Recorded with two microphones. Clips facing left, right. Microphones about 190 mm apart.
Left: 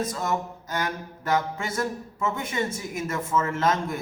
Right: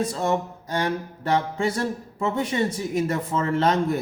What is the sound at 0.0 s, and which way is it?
Speech, 30° right (ahead or behind).